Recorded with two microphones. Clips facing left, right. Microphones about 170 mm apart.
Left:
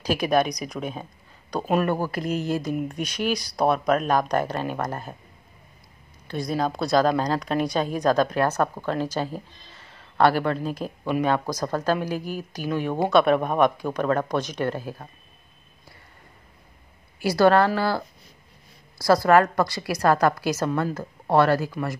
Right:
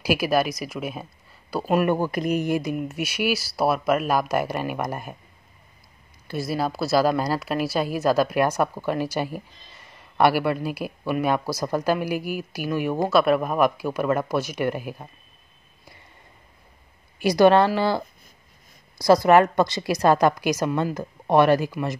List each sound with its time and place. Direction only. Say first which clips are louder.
0.0 s speech: even; 5° right (ahead or behind)
1.9 s a woman's voice: right 3 dB; 15° right (ahead or behind)
2.7 s a woman's voice: even; 5° right (ahead or behind)
6.2 s a woman's voice: even; 5° right (ahead or behind)
17.2 s a woman's voice: right 2 dB; 20° right (ahead or behind)